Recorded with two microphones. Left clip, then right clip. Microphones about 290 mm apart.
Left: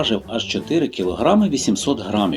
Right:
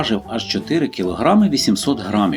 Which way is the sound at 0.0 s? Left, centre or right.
Right.